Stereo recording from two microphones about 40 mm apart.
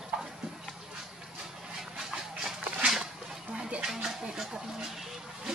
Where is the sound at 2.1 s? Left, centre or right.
Centre.